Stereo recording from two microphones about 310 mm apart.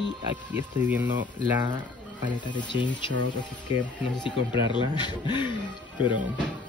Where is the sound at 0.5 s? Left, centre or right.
Centre.